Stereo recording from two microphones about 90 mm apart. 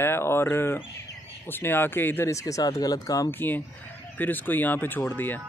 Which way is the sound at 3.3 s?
20° left (ahead or behind).